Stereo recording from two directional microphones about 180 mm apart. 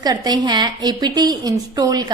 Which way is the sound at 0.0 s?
20° right (ahead or behind).